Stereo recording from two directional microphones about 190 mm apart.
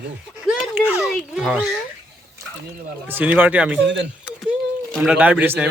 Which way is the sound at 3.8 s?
70° right (ahead or behind).